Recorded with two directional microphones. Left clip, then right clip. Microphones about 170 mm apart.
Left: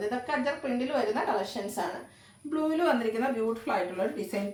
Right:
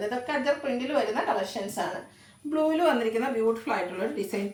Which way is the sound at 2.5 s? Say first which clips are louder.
Right 3 dB; 20° right (ahead or behind).